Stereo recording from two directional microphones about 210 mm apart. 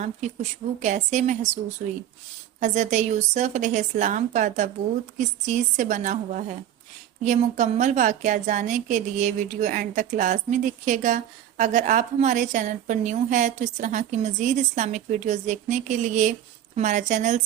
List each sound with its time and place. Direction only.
0.8 s a woman's voice: 35° right (ahead or behind)
2.6 s a woman's voice: 35° right (ahead or behind)